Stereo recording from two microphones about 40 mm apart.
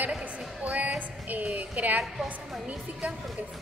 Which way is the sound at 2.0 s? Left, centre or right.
Centre.